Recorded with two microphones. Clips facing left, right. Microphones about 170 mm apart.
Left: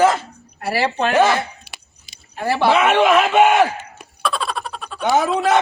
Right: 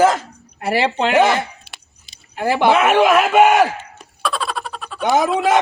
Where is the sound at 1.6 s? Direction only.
5° left (ahead or behind).